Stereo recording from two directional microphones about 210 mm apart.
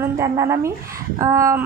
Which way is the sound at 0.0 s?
15° right (ahead or behind).